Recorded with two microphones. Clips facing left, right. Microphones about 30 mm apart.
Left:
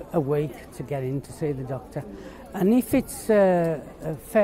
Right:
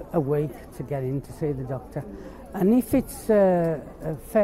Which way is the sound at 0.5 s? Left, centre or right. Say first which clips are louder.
Even; left.